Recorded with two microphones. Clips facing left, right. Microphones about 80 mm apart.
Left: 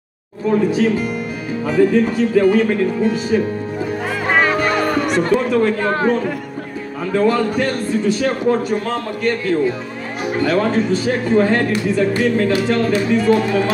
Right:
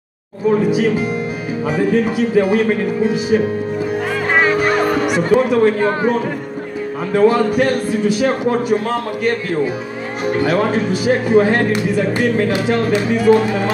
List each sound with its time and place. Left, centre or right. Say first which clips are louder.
0.7 s a man's voice: right 1 dB; centre
4.3 s music: right 1 dB; centre
5.9 s a man's voice: even; centre